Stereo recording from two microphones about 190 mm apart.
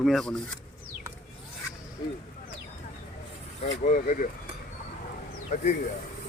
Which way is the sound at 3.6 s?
40° left (ahead or behind).